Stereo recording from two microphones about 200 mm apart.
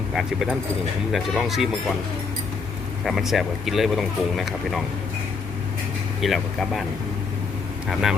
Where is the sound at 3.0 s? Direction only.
Centre (ahead or behind).